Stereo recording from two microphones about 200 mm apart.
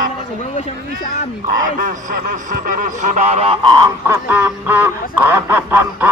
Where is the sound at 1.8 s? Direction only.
40° right (ahead or behind); by 4.2 s 20° right (ahead or behind).